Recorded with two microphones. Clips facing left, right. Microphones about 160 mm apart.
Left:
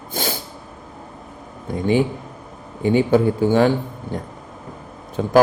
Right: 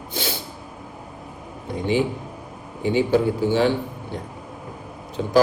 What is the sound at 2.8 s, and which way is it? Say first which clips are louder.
A man's voice: left 3 dB; 50° left (ahead or behind).